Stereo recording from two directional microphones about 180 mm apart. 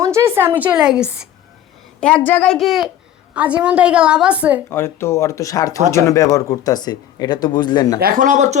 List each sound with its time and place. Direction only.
0.0 s speech: 15° right (ahead or behind)
2.0 s a woman's voice: 5° left (ahead or behind)
4.7 s speech: 15° left (ahead or behind)
7.9 s speech: 55° right (ahead or behind)